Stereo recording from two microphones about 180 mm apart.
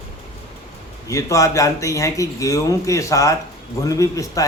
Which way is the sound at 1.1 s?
15° left (ahead or behind).